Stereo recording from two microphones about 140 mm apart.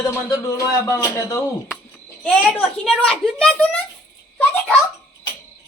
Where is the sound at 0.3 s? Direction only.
25° left (ahead or behind).